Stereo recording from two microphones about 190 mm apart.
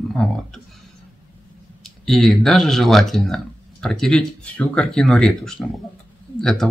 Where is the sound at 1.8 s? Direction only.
Centre (ahead or behind).